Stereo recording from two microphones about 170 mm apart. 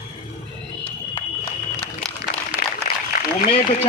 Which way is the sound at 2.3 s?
55° left (ahead or behind).